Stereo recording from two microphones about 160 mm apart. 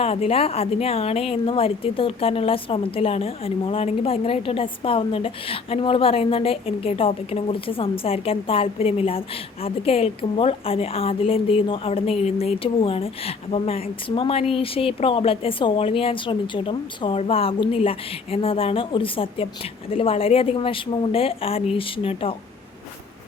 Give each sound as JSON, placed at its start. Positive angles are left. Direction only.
{"t": 0.0, "sound": "a woman's voice", "side_deg": 40}